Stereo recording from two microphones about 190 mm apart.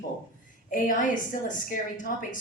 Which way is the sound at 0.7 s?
45° left (ahead or behind).